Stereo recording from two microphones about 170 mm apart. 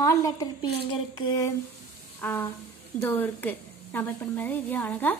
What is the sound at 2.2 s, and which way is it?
Music, 10° left (ahead or behind).